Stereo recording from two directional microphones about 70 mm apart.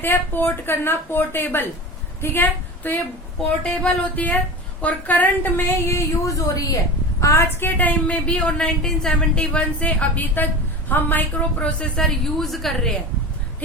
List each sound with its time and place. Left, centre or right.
0.0 s a woman's voice: left
3.6 s a woman's voice: centre; by 7.4 s left
7.6 s a woman's voice: left
11.9 s a woman's voice: centre